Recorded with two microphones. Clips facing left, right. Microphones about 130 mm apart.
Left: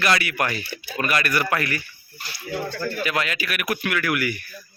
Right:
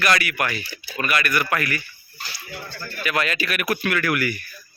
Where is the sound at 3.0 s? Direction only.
20° left (ahead or behind).